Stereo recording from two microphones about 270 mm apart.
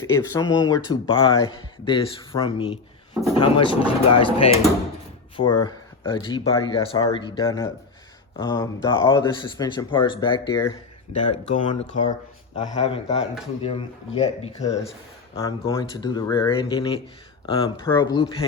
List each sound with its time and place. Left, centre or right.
0.0 s speech: centre
5.4 s speech: centre
15.4 s speech: centre